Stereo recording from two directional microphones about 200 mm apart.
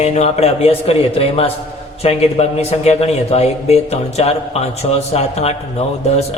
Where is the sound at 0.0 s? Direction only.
30° left (ahead or behind).